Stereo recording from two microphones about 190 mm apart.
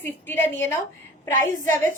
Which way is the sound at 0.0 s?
10° left (ahead or behind).